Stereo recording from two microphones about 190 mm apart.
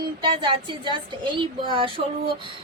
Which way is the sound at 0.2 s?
25° right (ahead or behind).